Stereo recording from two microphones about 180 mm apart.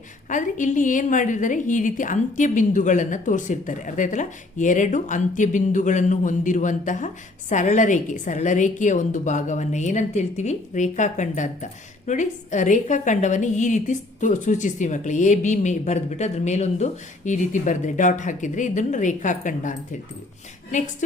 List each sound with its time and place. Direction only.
0.3 s a woman's voice: 45° left (ahead or behind)